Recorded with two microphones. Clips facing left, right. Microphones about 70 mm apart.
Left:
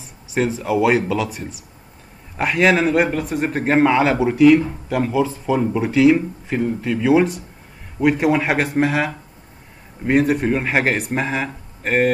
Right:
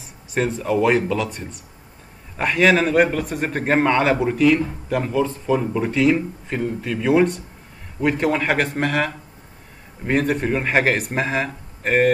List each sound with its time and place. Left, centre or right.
0.0 s a man's voice: centre